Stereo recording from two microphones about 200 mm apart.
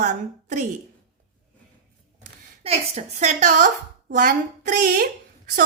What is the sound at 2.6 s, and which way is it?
A woman's voice, 30° right (ahead or behind).